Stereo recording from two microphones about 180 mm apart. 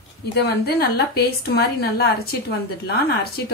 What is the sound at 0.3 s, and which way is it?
A woman's voice, 65° left (ahead or behind).